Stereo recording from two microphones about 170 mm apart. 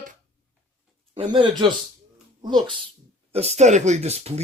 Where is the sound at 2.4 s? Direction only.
25° right (ahead or behind).